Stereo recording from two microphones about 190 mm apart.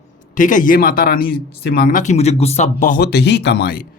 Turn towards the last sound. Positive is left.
turn(degrees=55)  # may be behind; listen again after turning